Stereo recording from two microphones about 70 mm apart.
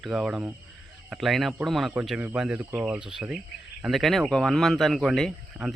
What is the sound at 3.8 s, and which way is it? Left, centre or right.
Speech, centre.